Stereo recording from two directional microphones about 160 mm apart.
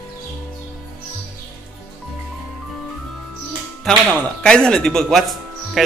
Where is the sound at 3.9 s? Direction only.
5° left (ahead or behind).